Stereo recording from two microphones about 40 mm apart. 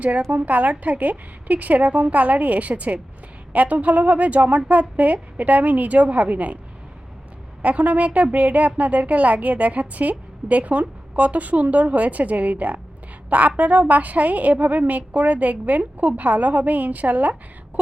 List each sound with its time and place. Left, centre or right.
0.3 s speech: right
7.6 s speech: right